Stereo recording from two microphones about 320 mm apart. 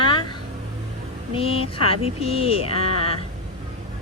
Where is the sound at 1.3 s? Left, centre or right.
Centre.